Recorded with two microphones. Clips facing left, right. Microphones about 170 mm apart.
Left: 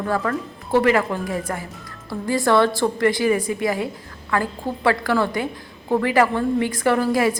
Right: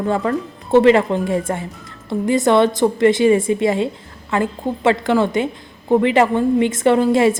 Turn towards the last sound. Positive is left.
turn(degrees=-25)  # may be behind; listen again after turning